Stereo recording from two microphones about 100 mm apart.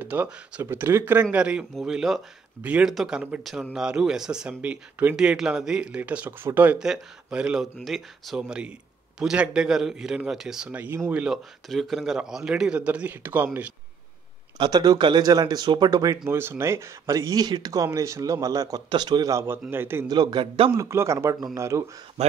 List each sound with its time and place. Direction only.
0.0 s speech: 15° right (ahead or behind)
1.2 s speech: 10° right (ahead or behind)
6.8 s a man's voice: 5° right (ahead or behind)
10.7 s speech: 15° right (ahead or behind)
11.7 s speech: centre (ahead or behind); by 13.7 s 15° right (ahead or behind)
14.6 s speech: 40° right (ahead or behind)
16.3 s speech: 25° right (ahead or behind); by 19.3 s 45° right (ahead or behind)
19.3 s speech: 20° right (ahead or behind)
20.1 s speech: 45° right (ahead or behind)
20.7 s speech: 30° right (ahead or behind)